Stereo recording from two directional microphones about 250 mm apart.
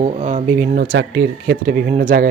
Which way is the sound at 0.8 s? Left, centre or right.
Right.